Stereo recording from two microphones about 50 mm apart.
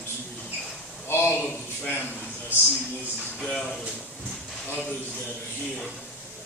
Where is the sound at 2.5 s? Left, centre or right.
Right.